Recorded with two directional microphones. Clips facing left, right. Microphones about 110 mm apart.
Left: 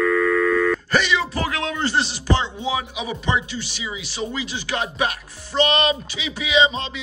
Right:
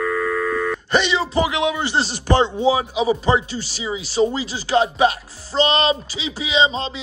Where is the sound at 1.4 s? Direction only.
15° right (ahead or behind).